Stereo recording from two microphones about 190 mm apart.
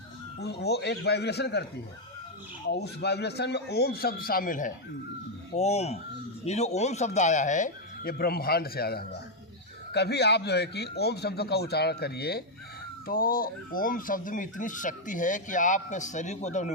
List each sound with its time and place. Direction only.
0.3 s a man's voice: 60° left (ahead or behind)
2.6 s a man's voice: 60° left (ahead or behind); by 4.7 s 45° left (ahead or behind)
5.5 s a man's voice: 35° left (ahead or behind)